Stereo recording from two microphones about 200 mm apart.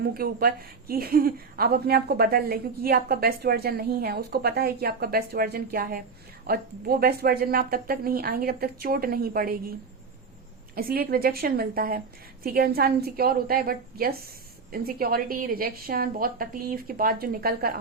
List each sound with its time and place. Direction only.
0.0 s a woman's voice: 50° right (ahead or behind)
10.8 s a woman's voice: 45° right (ahead or behind)